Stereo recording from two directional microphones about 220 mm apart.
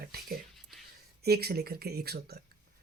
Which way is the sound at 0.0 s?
45° right (ahead or behind).